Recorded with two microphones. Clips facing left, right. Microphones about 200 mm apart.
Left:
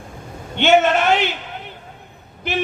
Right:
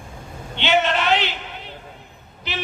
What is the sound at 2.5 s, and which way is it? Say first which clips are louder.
Speech: left 8 dB; 50° left (ahead or behind).